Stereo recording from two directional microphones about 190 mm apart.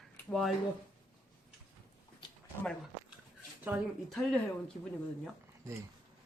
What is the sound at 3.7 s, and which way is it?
Speech, 10° right (ahead or behind).